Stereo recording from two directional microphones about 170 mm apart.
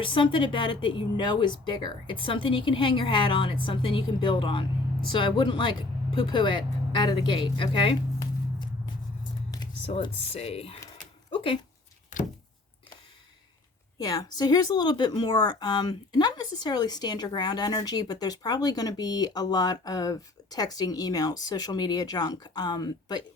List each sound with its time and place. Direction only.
0.0 s a woman's voice: 30° left (ahead or behind)
9.8 s speech: 35° left (ahead or behind)
14.0 s a woman's voice: 20° left (ahead or behind)